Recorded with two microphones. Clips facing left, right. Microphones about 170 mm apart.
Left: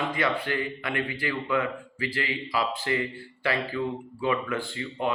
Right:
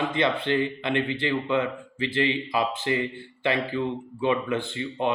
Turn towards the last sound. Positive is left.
turn(degrees=-20)  # may be behind; listen again after turning